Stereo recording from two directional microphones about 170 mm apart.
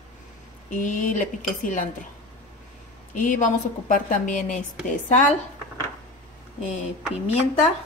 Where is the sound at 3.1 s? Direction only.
50° left (ahead or behind).